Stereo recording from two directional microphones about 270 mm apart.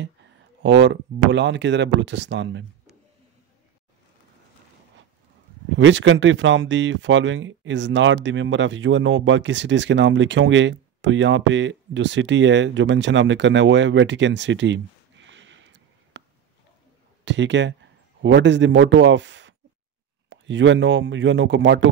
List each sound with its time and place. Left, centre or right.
0.6 s speech: right
5.7 s speech: right
17.2 s speech: right